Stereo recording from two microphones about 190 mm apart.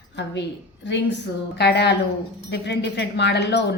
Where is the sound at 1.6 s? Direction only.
60° left (ahead or behind).